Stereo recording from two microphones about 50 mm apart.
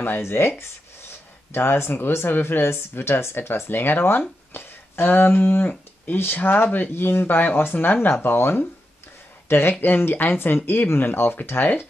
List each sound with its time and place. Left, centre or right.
0.2 s speech: left
1.5 s speech: left